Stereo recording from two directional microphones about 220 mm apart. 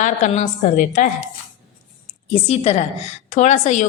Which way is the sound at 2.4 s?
25° left (ahead or behind).